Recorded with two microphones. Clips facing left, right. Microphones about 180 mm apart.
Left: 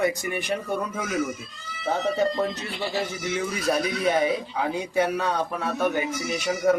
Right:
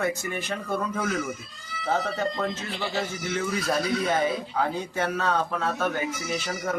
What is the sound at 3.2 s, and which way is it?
A man's voice, 15° left (ahead or behind).